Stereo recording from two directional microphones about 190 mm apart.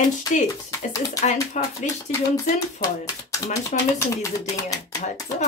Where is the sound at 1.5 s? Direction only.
40° left (ahead or behind).